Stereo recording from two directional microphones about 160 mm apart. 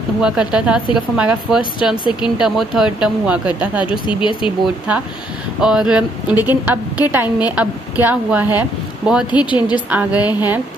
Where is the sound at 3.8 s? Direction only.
30° left (ahead or behind).